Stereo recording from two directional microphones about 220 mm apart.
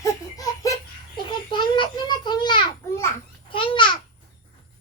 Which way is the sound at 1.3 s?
20° left (ahead or behind).